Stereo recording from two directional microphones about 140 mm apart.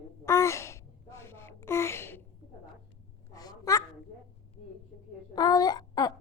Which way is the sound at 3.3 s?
25° left (ahead or behind).